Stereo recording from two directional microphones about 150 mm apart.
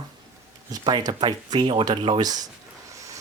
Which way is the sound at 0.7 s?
25° right (ahead or behind).